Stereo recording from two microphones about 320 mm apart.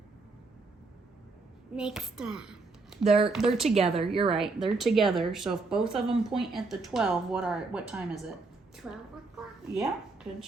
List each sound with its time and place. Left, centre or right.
1.7 s a woman's voice: centre
3.0 s speech: centre
3.2 s speech: centre
3.8 s a woman's voice: centre
4.3 s speech: centre
8.7 s a sound: centre